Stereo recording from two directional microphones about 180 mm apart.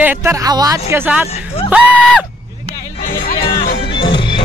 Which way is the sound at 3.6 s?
65° left (ahead or behind).